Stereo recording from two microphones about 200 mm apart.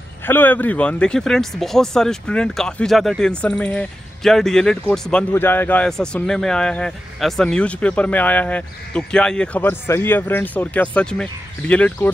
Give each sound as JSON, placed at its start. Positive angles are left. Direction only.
{"t": 0.2, "sound": "speech", "side_deg": 10}